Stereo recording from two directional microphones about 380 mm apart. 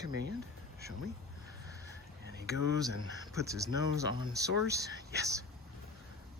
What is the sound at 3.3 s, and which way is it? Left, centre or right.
Speech, centre.